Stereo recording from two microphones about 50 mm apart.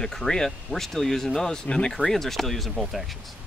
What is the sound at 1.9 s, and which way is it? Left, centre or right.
Speech, centre.